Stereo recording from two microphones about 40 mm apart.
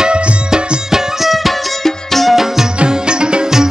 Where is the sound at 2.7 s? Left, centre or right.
Right.